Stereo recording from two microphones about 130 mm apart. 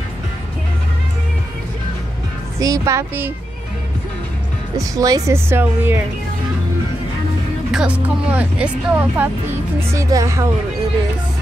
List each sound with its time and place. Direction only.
2.6 s a woman's voice: 25° right (ahead or behind)
4.7 s a woman's voice: 25° right (ahead or behind)
7.7 s speech: 10° right (ahead or behind); by 10.5 s 25° right (ahead or behind)